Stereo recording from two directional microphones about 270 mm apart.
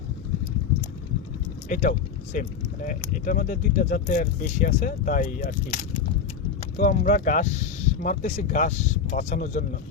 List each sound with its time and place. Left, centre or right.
1.7 s speech: left